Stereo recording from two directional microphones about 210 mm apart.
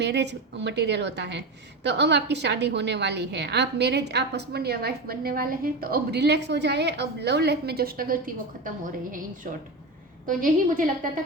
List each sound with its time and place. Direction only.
0.0 s a woman's voice: 55° right (ahead or behind)
10.2 s a woman's voice: 40° right (ahead or behind)